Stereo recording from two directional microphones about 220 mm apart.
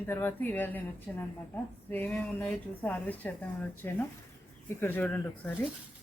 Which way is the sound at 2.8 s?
5° left (ahead or behind).